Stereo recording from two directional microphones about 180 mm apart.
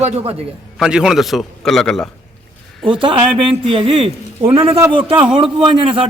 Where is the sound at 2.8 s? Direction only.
30° right (ahead or behind).